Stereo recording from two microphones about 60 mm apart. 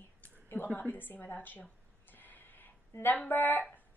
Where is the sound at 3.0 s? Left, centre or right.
Left.